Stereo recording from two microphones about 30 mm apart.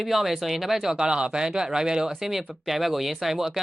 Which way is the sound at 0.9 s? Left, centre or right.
Right.